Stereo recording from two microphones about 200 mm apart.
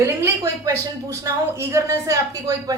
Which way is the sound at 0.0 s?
15° right (ahead or behind).